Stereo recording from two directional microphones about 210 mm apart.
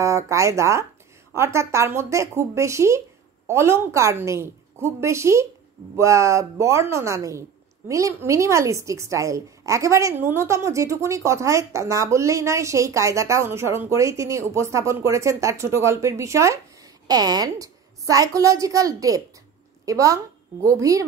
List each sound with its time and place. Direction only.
0.0 s a woman's voice: 15° right (ahead or behind)